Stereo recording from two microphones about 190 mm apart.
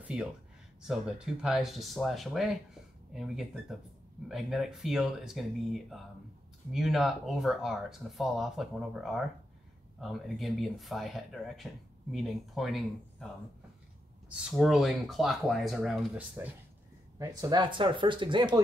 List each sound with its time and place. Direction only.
0.0 s speech: 5° right (ahead or behind)
14.3 s speech: 5° right (ahead or behind)
17.2 s speech: 20° right (ahead or behind)